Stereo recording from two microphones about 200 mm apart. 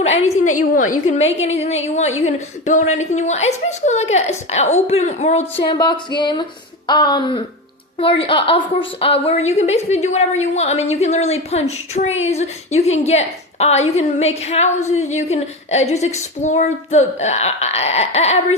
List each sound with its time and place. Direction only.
0.0 s a woman's voice: 35° left (ahead or behind)